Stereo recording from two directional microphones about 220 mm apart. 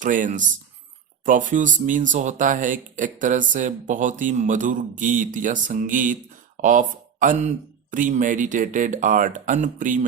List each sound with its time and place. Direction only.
0.0 s speech: 35° right (ahead or behind)